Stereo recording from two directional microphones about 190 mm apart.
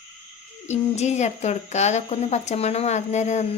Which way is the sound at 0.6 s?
35° left (ahead or behind).